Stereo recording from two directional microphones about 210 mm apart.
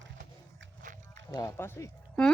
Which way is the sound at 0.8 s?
35° right (ahead or behind).